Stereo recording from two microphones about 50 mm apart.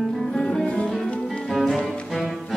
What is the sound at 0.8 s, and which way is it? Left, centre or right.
Music, centre.